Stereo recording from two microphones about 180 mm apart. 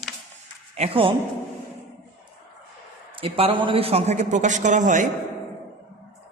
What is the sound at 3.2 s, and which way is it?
A man's voice, 30° right (ahead or behind).